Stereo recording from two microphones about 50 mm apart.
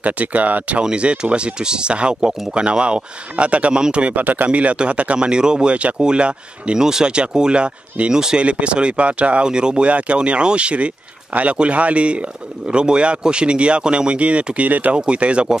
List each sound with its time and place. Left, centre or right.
0.0 s speech: right
0.8 s speech: centre